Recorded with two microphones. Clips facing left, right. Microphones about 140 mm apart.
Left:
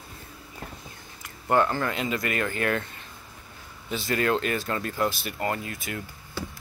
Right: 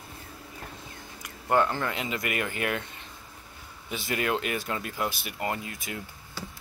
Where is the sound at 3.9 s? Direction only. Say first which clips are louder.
Left 4 dB; 15° right (ahead or behind).